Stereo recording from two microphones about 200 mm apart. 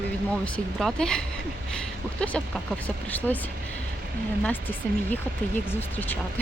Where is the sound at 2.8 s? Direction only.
10° left (ahead or behind).